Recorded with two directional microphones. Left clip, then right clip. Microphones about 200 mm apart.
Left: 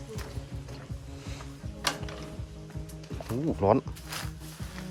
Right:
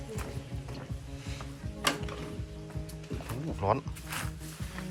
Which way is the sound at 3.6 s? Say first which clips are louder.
Left 5 dB; 35° left (ahead or behind).